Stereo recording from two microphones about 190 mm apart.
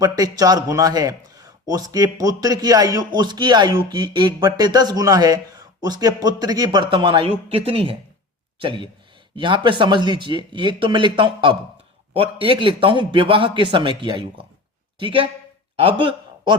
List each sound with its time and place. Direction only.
0.0 s a man's voice: 20° right (ahead or behind)